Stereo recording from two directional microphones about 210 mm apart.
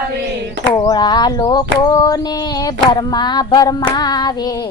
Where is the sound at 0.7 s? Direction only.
20° left (ahead or behind).